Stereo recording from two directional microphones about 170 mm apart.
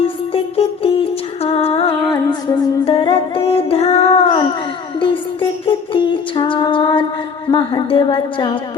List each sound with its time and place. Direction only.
0.3 s music: 35° left (ahead or behind)
7.4 s a woman's voice: 30° left (ahead or behind)